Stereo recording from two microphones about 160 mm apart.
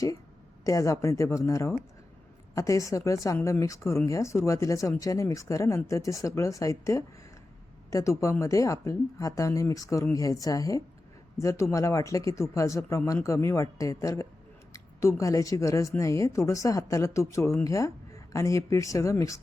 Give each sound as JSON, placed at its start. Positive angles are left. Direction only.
{"t": 0.6, "sound": "speech", "side_deg": 20}